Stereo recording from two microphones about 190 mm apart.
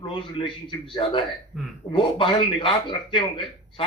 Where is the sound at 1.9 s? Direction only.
30° left (ahead or behind).